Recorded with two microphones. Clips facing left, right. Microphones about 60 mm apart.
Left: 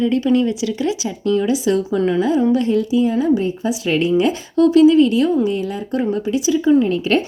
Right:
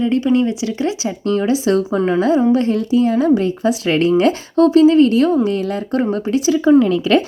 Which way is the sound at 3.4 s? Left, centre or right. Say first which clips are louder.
Right 3 dB; right.